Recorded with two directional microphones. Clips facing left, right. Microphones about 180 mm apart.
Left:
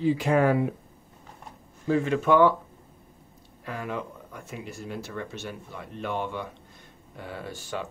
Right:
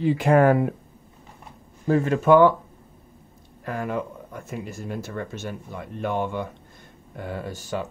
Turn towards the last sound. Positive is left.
turn(degrees=-45)  # may be behind; listen again after turning